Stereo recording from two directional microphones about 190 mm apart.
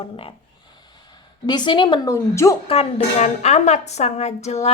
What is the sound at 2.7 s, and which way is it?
A woman's voice, 35° left (ahead or behind).